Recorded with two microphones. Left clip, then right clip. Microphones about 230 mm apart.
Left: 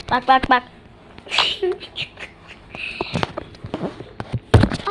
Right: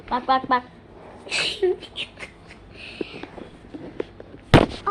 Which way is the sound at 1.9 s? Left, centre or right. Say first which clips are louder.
Left 3 dB; centre.